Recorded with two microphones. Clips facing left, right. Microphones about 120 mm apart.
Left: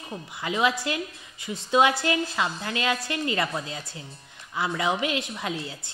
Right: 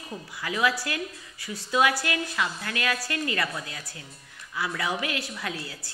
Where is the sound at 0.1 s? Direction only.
25° left (ahead or behind).